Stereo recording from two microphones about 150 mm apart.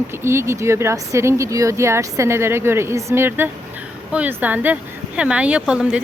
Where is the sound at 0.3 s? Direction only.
20° right (ahead or behind).